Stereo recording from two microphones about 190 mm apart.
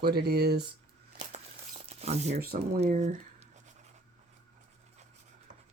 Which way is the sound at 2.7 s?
35° right (ahead or behind).